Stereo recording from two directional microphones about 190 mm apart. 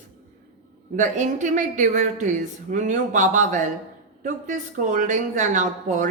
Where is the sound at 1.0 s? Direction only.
40° right (ahead or behind).